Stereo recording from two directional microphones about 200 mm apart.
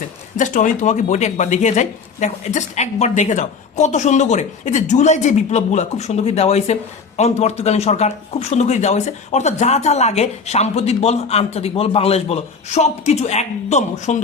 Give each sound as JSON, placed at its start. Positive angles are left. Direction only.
{"t": 0.3, "sound": "speech", "side_deg": 40}